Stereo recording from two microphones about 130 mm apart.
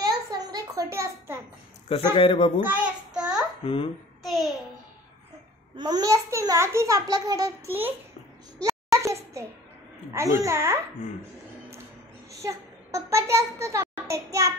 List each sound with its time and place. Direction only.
0.0 s a sound: 30° right (ahead or behind)
2.1 s speech: 50° left (ahead or behind)
2.6 s child singing: 10° right (ahead or behind)
3.6 s speech: 45° left (ahead or behind)
4.2 s a sound: centre (ahead or behind)
5.8 s a child's voice: 30° right (ahead or behind)
8.5 s a sound: 25° right (ahead or behind)
10.1 s a child's voice: 20° right (ahead or behind)
12.3 s a child's voice: 25° right (ahead or behind)